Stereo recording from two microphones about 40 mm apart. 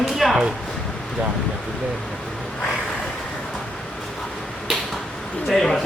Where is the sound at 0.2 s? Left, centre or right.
Centre.